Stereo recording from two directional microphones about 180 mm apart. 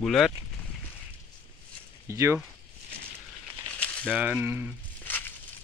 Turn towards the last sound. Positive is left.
turn(degrees=10)  # may be behind; listen again after turning